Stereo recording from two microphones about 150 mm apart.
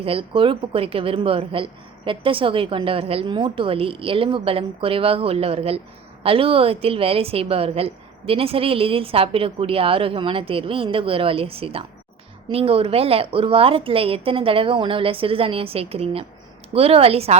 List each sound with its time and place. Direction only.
0.0 s a woman's voice: 35° right (ahead or behind)